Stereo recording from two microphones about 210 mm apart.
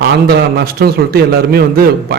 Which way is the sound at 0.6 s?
45° right (ahead or behind).